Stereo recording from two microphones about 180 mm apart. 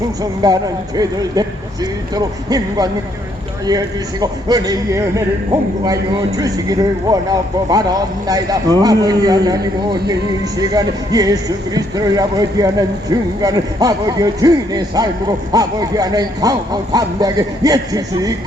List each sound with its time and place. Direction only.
0.2 s speech: 20° right (ahead or behind)